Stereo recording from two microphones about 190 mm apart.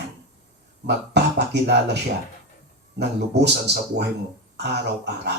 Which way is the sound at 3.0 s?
60° right (ahead or behind).